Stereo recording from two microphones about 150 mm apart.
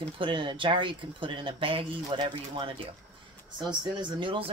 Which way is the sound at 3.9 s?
35° right (ahead or behind).